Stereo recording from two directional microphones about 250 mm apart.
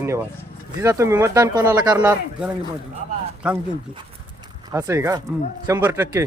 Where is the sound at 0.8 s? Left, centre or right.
Centre.